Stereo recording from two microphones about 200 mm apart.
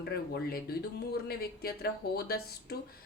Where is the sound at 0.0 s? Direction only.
55° left (ahead or behind).